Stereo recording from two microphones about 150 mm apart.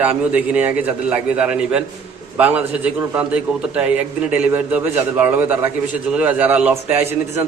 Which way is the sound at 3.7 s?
10° right (ahead or behind).